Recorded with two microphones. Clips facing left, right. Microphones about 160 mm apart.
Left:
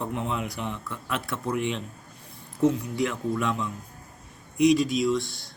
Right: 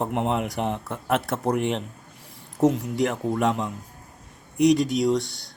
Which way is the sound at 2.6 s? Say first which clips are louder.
Right 2 dB; 45° right (ahead or behind).